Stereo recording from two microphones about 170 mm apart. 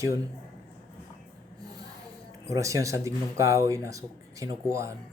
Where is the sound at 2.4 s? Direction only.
20° right (ahead or behind).